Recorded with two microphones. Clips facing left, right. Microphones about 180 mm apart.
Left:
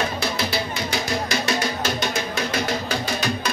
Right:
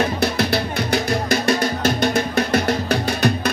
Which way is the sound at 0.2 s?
60° right (ahead or behind).